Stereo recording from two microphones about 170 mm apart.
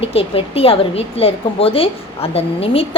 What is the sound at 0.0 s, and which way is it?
A woman's voice, 35° left (ahead or behind).